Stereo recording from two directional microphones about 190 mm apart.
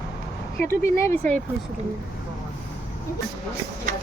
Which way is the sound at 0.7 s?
15° left (ahead or behind).